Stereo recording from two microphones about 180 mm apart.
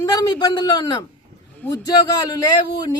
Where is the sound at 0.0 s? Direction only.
20° left (ahead or behind).